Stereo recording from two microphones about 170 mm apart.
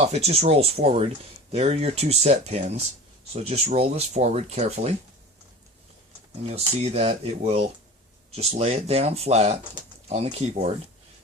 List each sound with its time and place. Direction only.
0.1 s speech: 40° right (ahead or behind)
6.5 s speech: 35° right (ahead or behind)